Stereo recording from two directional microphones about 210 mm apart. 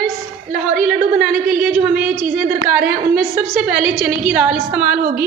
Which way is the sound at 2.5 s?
45° right (ahead or behind).